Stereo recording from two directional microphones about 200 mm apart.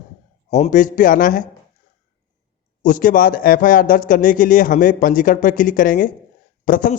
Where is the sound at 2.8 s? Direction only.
40° left (ahead or behind).